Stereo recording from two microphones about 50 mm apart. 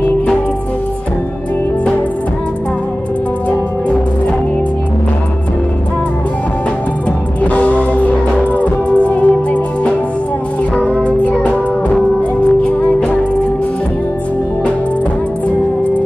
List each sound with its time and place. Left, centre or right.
7.4 s music: left
10.8 s music: left